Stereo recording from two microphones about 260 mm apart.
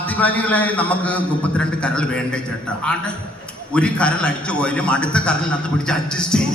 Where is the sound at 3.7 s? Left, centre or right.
Centre.